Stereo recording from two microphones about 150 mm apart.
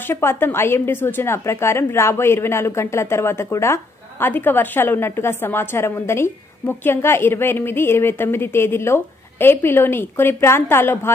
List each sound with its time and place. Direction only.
0.1 s a woman's voice: 15° left (ahead or behind)